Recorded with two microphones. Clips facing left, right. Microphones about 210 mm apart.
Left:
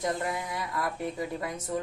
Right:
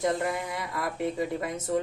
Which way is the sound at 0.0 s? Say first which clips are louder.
Right 3 dB; 25° right (ahead or behind).